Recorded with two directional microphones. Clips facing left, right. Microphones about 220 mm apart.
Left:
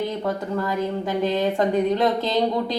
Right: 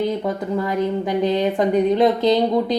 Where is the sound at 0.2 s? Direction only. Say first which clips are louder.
Right 3 dB; 20° right (ahead or behind).